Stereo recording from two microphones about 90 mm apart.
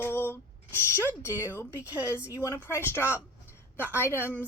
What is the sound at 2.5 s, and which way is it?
Speech, 30° left (ahead or behind).